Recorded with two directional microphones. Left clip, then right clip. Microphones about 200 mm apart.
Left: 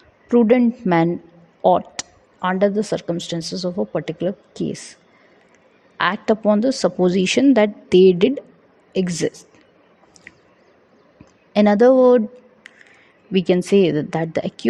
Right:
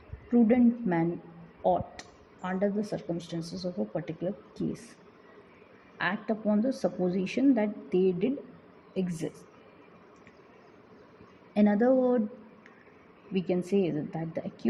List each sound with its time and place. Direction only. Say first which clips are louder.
0.3 s a woman's voice: left 10 dB; 55° left (ahead or behind)
6.0 s speech: left 13 dB; 50° left (ahead or behind)
11.5 s speech: left 12 dB; 50° left (ahead or behind)
13.3 s a woman's voice: left 13 dB; 55° left (ahead or behind)